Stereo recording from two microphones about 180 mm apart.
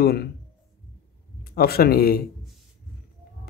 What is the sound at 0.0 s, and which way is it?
Speech, 60° left (ahead or behind).